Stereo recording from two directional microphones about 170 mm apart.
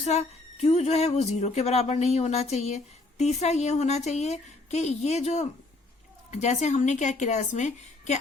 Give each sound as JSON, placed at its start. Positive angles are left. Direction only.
{"t": 0.0, "sound": "a woman's voice", "side_deg": 40}